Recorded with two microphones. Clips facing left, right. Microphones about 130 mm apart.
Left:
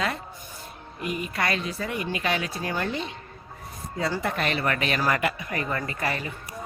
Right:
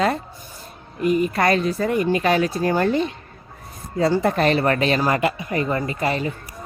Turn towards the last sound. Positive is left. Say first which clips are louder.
# right 7 dB
turn(degrees=-25)  # may be behind; listen again after turning